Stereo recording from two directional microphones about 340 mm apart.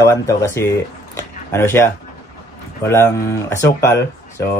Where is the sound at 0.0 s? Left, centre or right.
Centre.